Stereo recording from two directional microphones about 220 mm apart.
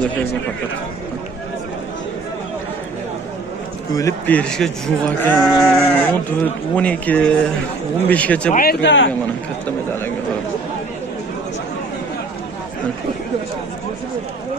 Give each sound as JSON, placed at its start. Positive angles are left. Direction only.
{"t": 3.9, "sound": "speech", "side_deg": 10}
{"t": 8.8, "sound": "speech", "side_deg": 55}